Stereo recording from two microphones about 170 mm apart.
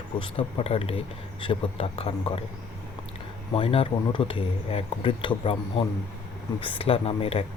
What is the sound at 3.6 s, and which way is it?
Speech, 35° left (ahead or behind).